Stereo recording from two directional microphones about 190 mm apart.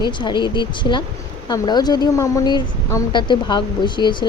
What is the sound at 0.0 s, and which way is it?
Speech, 25° left (ahead or behind).